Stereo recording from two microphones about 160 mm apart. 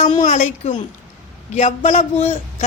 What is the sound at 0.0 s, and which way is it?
Speech, 50° left (ahead or behind).